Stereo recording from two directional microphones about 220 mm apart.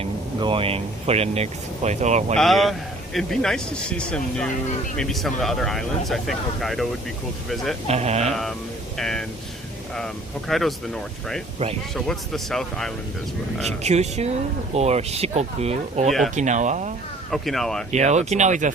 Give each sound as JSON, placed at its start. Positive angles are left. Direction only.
{"t": 0.0, "sound": "speech", "side_deg": -25}
{"t": 2.3, "sound": "a man's voice", "side_deg": 0}
{"t": 7.9, "sound": "speech", "side_deg": -30}
{"t": 8.3, "sound": "a man's voice", "side_deg": 0}
{"t": 10.5, "sound": "a man's voice", "side_deg": 0}
{"t": 13.8, "sound": "speech", "side_deg": -30}
{"t": 17.3, "sound": "a man's voice", "side_deg": 0}
{"t": 17.9, "sound": "speech", "side_deg": -30}